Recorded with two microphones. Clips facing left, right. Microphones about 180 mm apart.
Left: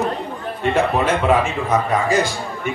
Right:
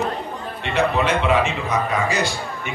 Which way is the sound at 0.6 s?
45° left (ahead or behind).